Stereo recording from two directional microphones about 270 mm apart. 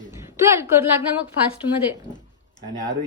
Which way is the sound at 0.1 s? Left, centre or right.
Centre.